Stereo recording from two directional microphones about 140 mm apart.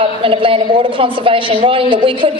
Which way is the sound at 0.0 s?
40° right (ahead or behind).